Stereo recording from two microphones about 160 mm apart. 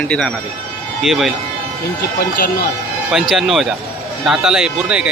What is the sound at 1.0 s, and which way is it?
Speech, centre (ahead or behind).